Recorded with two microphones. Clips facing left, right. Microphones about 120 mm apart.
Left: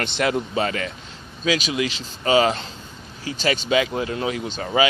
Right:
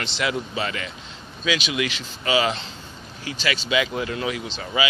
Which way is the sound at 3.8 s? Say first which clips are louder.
Left 2 dB; 35° left (ahead or behind).